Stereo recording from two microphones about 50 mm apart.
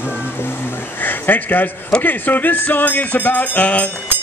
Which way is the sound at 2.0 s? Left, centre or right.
Left.